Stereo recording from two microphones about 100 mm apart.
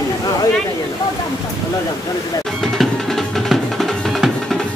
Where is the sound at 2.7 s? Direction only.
Centre (ahead or behind).